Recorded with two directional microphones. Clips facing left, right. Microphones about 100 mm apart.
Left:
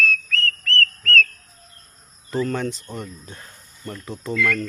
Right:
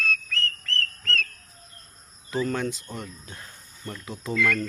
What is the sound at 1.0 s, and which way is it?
Whistle, 25° right (ahead or behind).